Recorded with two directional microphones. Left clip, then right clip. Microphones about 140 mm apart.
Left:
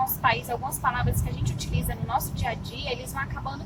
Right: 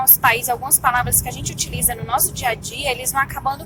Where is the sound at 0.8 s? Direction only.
30° right (ahead or behind).